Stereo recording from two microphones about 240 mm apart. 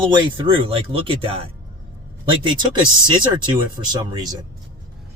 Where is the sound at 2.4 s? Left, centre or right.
Centre.